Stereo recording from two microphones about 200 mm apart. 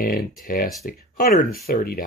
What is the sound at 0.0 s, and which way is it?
Speech, 50° left (ahead or behind).